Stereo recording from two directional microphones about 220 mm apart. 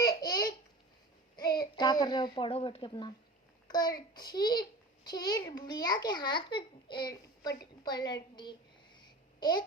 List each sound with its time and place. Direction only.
0.0 s babbling: 15° left (ahead or behind)
1.4 s a child's voice: 20° left (ahead or behind)
9.4 s babbling: 20° left (ahead or behind)